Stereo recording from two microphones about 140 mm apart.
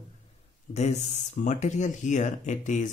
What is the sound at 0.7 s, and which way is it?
Speech, 55° left (ahead or behind).